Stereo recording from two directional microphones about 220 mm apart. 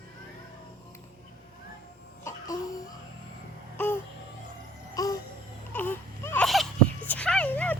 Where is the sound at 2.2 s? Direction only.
15° left (ahead or behind).